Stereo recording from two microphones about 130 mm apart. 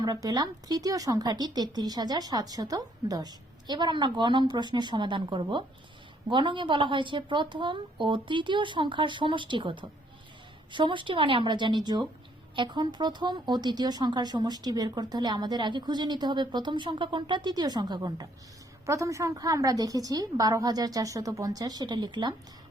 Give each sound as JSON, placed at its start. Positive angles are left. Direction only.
{"t": 0.0, "sound": "a woman's voice", "side_deg": -30}